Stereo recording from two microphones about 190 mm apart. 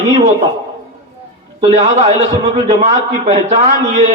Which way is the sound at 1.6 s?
35° right (ahead or behind).